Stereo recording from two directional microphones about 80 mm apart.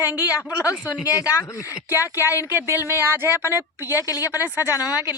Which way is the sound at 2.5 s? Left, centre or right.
Right.